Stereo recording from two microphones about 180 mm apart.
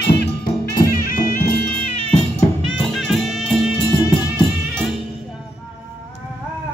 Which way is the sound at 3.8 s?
25° left (ahead or behind).